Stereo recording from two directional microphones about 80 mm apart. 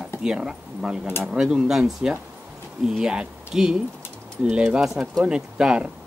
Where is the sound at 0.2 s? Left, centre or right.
Centre.